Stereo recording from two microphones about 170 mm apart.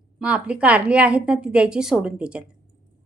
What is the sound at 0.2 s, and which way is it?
A woman's voice, 5° right (ahead or behind).